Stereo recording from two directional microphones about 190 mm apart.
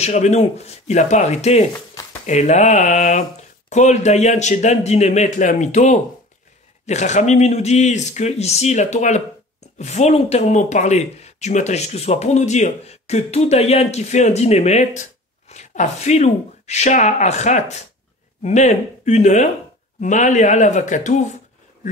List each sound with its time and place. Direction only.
0.0 s speech: 35° left (ahead or behind)